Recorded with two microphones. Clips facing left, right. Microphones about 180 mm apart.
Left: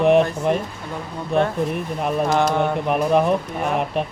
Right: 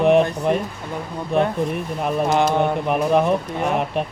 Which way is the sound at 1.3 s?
Centre (ahead or behind).